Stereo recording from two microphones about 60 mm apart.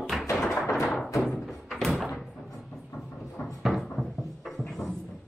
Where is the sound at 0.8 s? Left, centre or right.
Centre.